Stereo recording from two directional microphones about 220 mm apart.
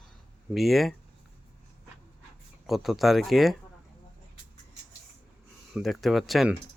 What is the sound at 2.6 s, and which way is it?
Speech, centre (ahead or behind).